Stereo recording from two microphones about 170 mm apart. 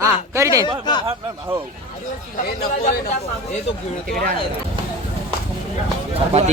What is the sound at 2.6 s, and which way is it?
Speech, 65° left (ahead or behind).